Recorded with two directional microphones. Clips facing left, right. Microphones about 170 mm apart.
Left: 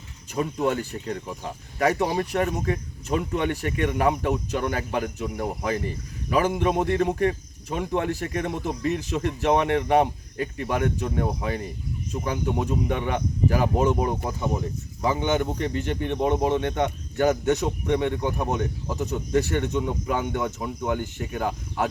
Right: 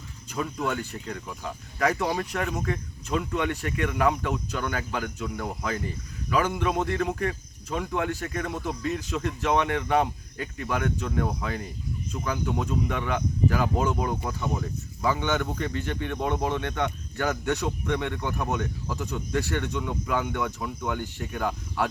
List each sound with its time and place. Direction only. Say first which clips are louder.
0.3 s speech: left 4 dB; 30° left (ahead or behind)
18.4 s speech: left 3 dB; 35° left (ahead or behind)
21.2 s speech: left 2 dB; 15° left (ahead or behind)